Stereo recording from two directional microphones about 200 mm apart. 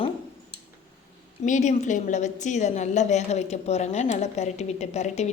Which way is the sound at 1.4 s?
35° left (ahead or behind).